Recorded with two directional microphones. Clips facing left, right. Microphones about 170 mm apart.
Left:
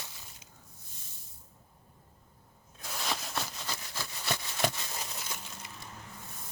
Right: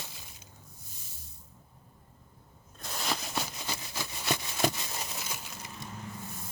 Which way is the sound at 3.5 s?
15° right (ahead or behind).